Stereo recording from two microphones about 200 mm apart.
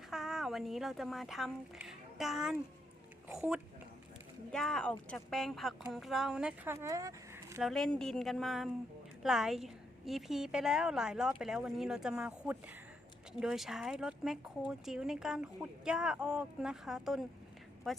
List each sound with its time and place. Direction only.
0.1 s speech: centre (ahead or behind)
6.7 s speech: 15° right (ahead or behind)
7.6 s speech: centre (ahead or behind)